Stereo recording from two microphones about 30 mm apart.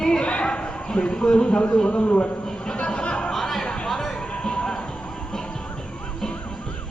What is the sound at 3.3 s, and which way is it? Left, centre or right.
Music, centre.